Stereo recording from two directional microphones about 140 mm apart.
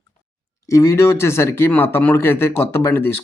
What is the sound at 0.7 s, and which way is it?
Speech, 20° left (ahead or behind).